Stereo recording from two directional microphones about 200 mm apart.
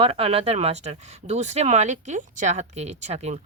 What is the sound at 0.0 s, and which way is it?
Speech, 30° right (ahead or behind).